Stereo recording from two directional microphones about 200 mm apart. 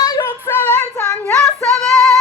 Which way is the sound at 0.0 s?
15° left (ahead or behind).